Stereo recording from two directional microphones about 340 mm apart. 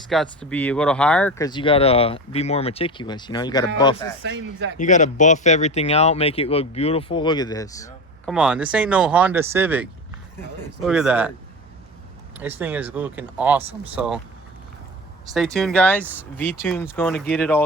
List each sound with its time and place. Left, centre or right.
0.1 s speech: centre
4.2 s speech: right
4.8 s speech: left
8.3 s speech: centre
12.4 s speech: centre
15.5 s speech: centre